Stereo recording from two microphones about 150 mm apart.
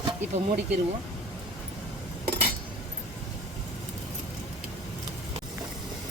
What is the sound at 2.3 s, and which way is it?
Cutlery, 90° right.